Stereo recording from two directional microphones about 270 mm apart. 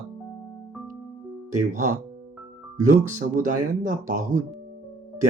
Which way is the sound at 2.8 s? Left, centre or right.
Right.